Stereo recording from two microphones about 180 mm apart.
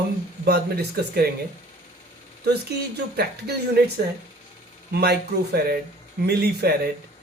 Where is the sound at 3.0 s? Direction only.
65° right (ahead or behind).